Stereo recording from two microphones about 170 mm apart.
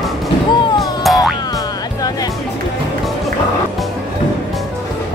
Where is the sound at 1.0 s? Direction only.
Centre (ahead or behind).